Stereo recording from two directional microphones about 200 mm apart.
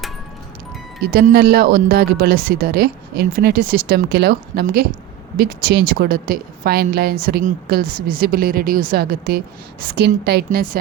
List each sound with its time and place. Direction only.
1.0 s a woman's voice: 50° right (ahead or behind)